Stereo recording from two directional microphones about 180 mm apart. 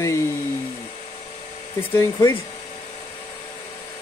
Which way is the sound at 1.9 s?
20° left (ahead or behind).